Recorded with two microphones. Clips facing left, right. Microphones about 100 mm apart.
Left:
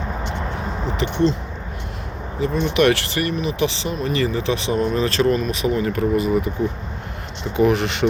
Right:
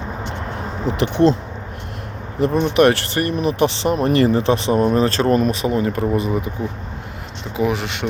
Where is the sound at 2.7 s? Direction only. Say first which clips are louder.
Right 1 dB; 40° right (ahead or behind).